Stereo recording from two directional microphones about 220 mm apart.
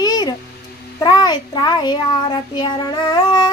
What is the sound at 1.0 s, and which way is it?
Child singing, 20° left (ahead or behind).